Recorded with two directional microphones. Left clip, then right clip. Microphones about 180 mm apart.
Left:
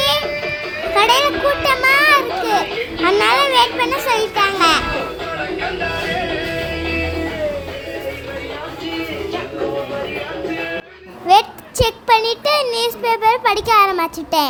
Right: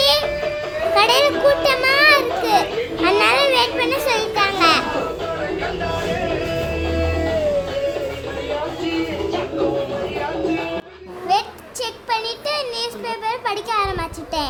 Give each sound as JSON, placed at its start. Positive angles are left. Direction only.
{"t": 0.0, "sound": "music", "side_deg": 5}
{"t": 0.9, "sound": "children playing", "side_deg": 5}
{"t": 11.3, "sound": "a sound", "side_deg": 30}